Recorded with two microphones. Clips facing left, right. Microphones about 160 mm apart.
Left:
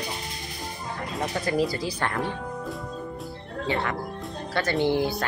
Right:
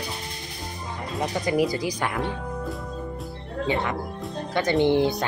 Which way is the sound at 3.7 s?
20° right (ahead or behind).